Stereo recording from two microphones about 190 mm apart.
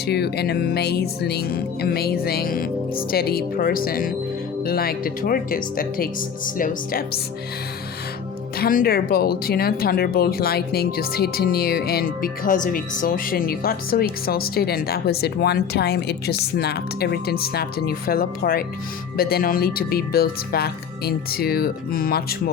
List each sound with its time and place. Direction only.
0.0 s speech: 60° left (ahead or behind)
8.5 s speech: 50° left (ahead or behind)